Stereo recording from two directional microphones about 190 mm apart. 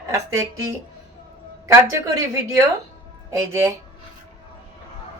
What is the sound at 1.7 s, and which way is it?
Speech, 15° right (ahead or behind).